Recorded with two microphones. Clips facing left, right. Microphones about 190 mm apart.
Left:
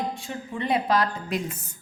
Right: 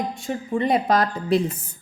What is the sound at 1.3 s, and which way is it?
Speech, 30° right (ahead or behind).